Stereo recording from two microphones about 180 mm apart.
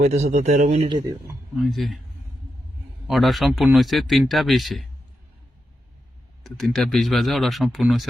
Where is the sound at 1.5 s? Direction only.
Centre (ahead or behind).